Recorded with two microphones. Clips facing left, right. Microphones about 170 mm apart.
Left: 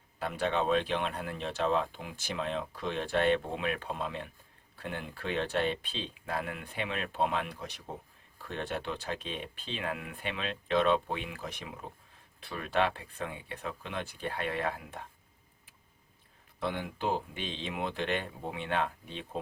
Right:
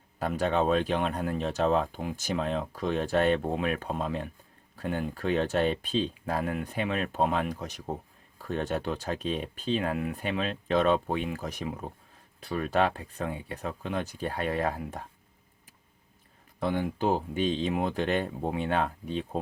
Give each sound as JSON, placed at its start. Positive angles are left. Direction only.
{"t": 0.2, "sound": "speech", "side_deg": -40}
{"t": 16.6, "sound": "speech", "side_deg": -45}